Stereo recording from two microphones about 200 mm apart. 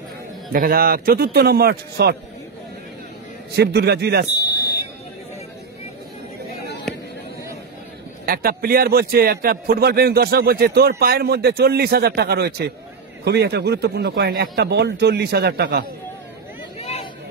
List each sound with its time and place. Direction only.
0.5 s a man's voice: 45° right (ahead or behind)
3.5 s a man's voice: 55° right (ahead or behind)
4.4 s buzzer: 20° left (ahead or behind)
8.3 s a man's voice: 50° right (ahead or behind)